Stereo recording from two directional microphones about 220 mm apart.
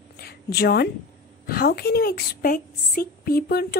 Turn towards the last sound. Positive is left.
turn(degrees=45)  # may be behind; listen again after turning